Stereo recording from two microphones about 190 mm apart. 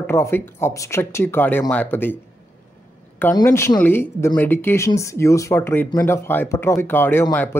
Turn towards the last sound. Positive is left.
turn(degrees=10)  # may be behind; listen again after turning